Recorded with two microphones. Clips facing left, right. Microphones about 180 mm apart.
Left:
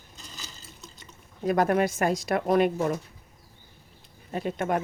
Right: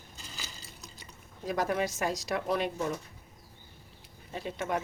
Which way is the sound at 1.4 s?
60° left (ahead or behind).